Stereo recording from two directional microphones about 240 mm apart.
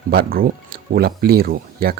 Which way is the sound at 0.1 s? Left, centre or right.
Right.